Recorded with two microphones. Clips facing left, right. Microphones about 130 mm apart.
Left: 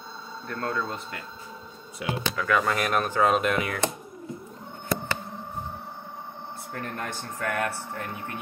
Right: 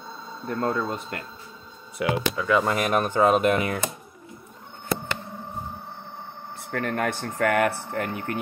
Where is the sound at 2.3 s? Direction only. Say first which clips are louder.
Even; 25° right (ahead or behind).